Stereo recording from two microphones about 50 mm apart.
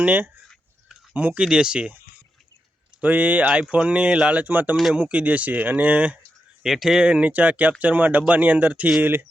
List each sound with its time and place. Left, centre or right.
0.0 s speech: right
1.4 s speech: centre
3.0 s speech: right
4.9 s speech: right
6.6 s speech: centre
7.0 s speech: right